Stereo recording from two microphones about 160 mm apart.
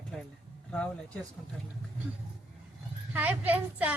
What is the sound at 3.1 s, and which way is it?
Speech, 10° right (ahead or behind).